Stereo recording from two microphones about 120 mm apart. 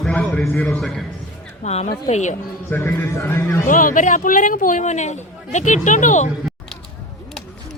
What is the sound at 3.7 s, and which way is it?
Speech, 90° left.